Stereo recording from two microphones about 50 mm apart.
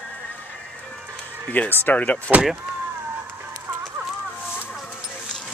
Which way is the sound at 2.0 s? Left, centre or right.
Left.